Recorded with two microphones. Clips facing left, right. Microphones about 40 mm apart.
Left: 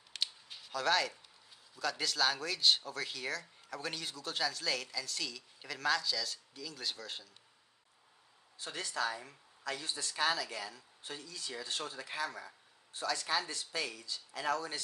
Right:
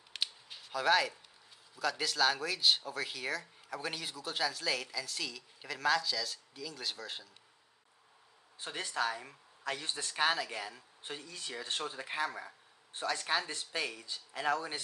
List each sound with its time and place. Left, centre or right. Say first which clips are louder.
0.1 s a sound: right 1 dB; centre
0.7 s speech: right 3 dB; centre
8.5 s speech: right 2 dB; right
12.9 s speech: right 1 dB; right